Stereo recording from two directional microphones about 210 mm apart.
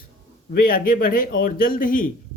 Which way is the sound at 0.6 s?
40° left (ahead or behind).